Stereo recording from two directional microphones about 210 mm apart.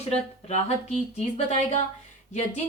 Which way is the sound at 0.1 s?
30° left (ahead or behind).